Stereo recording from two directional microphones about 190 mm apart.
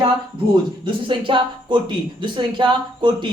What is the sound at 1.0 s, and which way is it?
Speech, 25° right (ahead or behind).